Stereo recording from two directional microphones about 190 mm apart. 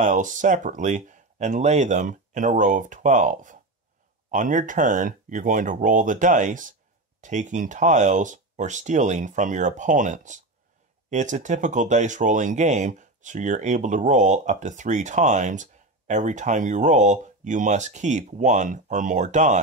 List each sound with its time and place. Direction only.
0.0 s speech: 40° right (ahead or behind)